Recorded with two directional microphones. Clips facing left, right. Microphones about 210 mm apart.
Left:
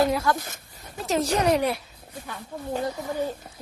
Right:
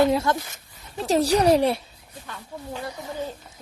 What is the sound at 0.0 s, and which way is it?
Speech, 25° right (ahead or behind).